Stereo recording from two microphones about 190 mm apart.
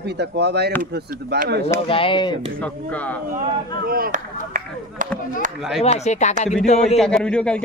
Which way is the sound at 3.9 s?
45° right (ahead or behind).